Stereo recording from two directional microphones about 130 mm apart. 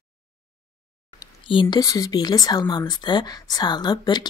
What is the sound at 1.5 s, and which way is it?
Speech, 35° left (ahead or behind).